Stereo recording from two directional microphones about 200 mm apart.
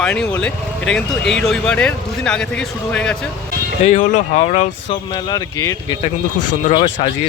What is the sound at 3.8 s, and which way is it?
Speech, 40° left (ahead or behind).